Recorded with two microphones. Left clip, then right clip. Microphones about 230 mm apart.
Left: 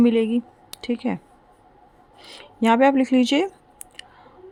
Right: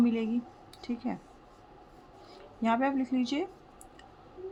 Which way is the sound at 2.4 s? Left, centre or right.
Left.